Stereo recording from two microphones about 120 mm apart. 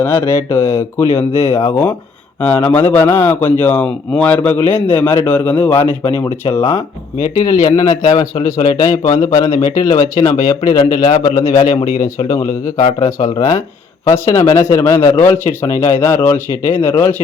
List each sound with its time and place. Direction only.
0.0 s a man's voice: 20° left (ahead or behind)